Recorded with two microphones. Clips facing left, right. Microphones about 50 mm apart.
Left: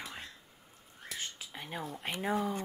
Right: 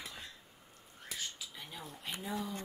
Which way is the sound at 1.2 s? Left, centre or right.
Left.